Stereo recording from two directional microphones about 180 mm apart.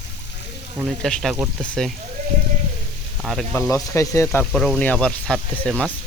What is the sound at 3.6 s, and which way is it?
Speech, 15° left (ahead or behind).